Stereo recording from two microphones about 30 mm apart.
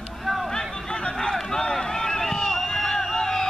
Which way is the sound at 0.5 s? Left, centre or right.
Left.